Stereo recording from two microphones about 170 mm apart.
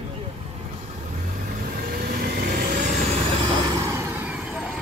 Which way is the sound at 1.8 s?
60° right (ahead or behind).